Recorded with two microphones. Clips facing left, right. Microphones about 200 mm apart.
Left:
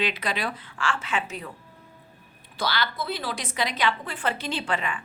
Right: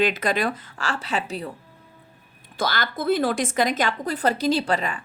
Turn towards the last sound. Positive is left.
turn(degrees=-40)  # may be behind; listen again after turning